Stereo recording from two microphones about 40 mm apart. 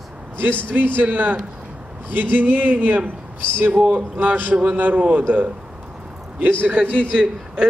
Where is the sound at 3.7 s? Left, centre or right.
Right.